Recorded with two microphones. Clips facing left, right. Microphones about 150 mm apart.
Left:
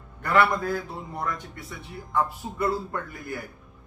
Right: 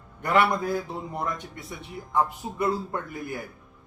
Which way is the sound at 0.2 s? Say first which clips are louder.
Even; 20° right (ahead or behind).